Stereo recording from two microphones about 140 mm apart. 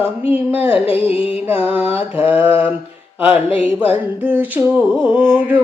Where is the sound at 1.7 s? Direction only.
10° right (ahead or behind).